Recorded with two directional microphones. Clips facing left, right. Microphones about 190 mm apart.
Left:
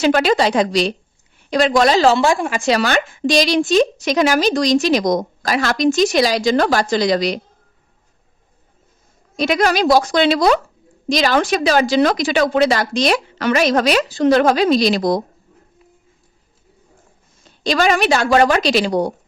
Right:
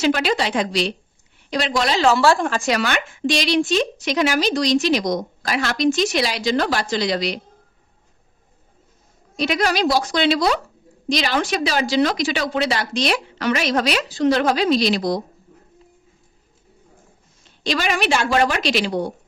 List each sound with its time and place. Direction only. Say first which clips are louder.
0.0 s a woman's voice: left 5 dB; 50° left (ahead or behind)
2.1 s a woman's voice: left 1 dB; 15° left (ahead or behind)
2.6 s a woman's voice: left 5 dB; 35° left (ahead or behind)
9.3 s a woman's voice: left 4 dB; 45° left (ahead or behind)
17.4 s a woman's voice: left 6 dB; 40° left (ahead or behind)